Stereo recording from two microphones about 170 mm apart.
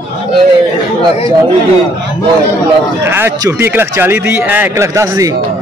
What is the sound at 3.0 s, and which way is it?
A man's voice, 15° right (ahead or behind).